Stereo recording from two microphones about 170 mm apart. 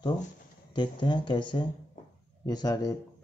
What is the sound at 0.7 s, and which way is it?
Speech, 25° left (ahead or behind).